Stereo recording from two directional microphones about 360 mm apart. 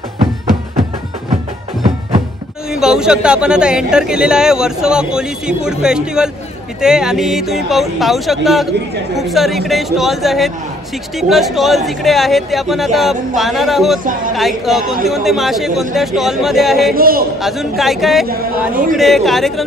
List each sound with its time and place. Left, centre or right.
2.7 s speech: centre
16.9 s a man's voice: right
17.4 s speech: centre